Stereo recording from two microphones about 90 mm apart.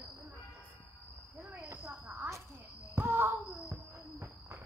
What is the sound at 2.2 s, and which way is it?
Cricket, 25° right (ahead or behind).